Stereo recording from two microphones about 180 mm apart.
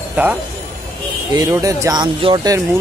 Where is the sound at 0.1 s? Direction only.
10° right (ahead or behind).